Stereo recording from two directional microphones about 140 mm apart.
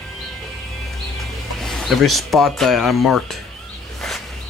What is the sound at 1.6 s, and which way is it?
Speech, centre (ahead or behind).